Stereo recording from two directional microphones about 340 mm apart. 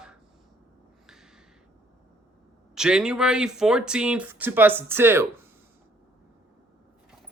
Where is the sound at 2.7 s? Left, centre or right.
Centre.